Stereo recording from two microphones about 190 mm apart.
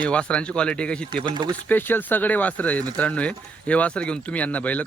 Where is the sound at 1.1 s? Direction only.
25° right (ahead or behind).